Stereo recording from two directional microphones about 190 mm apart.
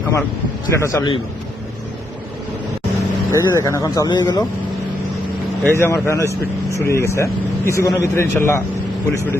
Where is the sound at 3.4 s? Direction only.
15° left (ahead or behind).